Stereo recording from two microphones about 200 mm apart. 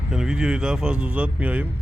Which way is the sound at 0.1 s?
5° right (ahead or behind).